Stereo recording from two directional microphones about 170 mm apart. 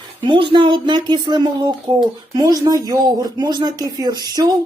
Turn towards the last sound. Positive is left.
turn(degrees=-25)  # may be behind; listen again after turning